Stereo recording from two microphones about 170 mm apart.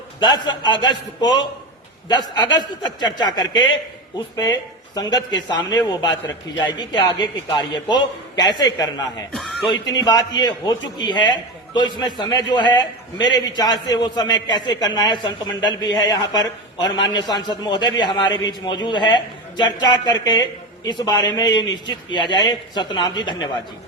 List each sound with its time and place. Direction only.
0.2 s a man's voice: 25° left (ahead or behind)
4.9 s a man's voice: 25° left (ahead or behind)
9.3 s music: centre (ahead or behind)
9.9 s a man's voice: 25° left (ahead or behind)